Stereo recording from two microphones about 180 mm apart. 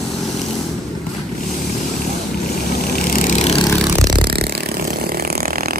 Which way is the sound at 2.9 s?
50° left (ahead or behind).